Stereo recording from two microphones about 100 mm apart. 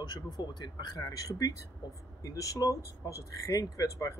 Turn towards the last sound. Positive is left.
turn(degrees=30)  # may be behind; listen again after turning